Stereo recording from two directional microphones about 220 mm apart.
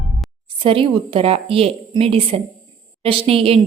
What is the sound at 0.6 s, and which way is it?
A woman's voice, 25° right (ahead or behind).